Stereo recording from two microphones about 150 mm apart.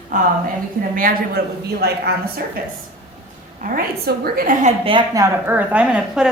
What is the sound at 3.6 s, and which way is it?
Speech, 75° right (ahead or behind).